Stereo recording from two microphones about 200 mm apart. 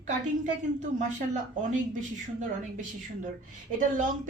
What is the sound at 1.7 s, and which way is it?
A woman's voice, 40° right (ahead or behind).